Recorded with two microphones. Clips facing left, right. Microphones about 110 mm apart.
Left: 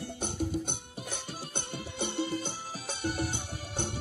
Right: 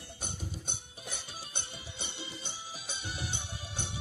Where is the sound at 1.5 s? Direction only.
50° left (ahead or behind).